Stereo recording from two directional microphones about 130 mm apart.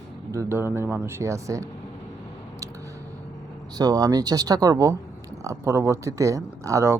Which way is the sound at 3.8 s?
30° right (ahead or behind).